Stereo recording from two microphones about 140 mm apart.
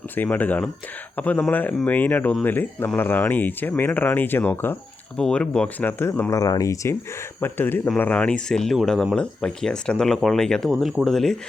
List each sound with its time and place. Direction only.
0.2 s speech: 10° left (ahead or behind)